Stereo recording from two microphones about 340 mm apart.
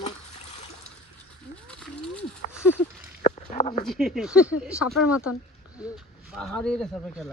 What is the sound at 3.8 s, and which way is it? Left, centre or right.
Speech, centre.